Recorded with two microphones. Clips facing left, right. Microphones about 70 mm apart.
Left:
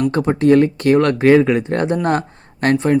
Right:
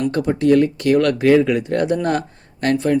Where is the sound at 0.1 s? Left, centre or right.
Left.